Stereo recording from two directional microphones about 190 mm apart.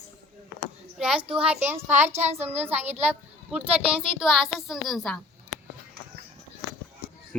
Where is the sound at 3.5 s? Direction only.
5° right (ahead or behind).